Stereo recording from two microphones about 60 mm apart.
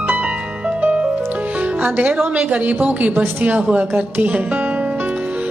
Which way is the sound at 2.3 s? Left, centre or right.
Right.